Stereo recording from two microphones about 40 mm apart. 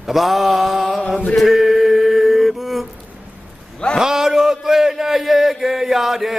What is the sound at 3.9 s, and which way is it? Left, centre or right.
A man's voice, centre.